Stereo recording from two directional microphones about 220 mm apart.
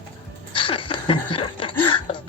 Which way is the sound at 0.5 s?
25° left (ahead or behind).